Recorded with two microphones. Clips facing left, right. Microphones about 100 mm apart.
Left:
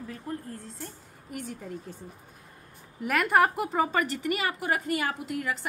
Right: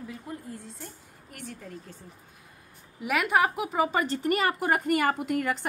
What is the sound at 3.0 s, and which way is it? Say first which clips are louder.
Speech: left 1 dB; 5° right (ahead or behind).